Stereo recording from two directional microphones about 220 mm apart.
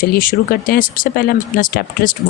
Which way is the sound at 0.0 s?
40° left (ahead or behind).